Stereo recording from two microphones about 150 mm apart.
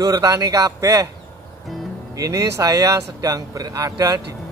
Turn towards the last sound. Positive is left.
turn(degrees=-25)  # may be behind; listen again after turning